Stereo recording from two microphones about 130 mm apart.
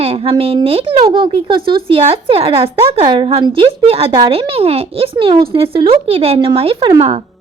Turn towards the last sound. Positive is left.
turn(degrees=-45)  # may be behind; listen again after turning